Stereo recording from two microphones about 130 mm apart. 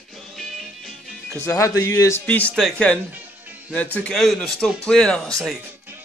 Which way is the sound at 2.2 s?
10° left (ahead or behind).